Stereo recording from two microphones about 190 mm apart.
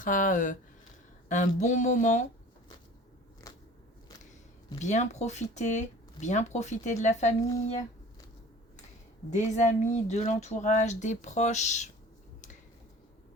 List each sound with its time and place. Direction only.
0.0 s speech: 45° left (ahead or behind)
4.8 s speech: 40° left (ahead or behind)
9.3 s speech: 40° left (ahead or behind)